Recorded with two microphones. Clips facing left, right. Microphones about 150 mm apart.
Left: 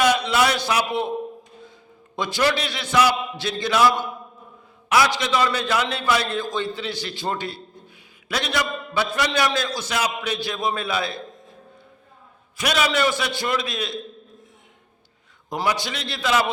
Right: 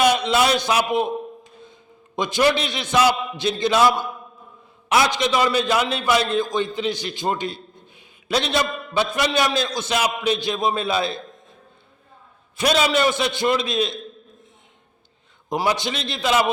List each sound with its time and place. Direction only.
0.0 s a man's voice: 20° right (ahead or behind)
2.1 s a man's voice: 20° right (ahead or behind)
12.5 s a man's voice: 25° right (ahead or behind)
15.4 s a man's voice: 20° right (ahead or behind)